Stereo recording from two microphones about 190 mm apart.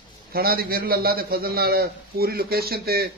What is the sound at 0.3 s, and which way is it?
Speech, 50° right (ahead or behind).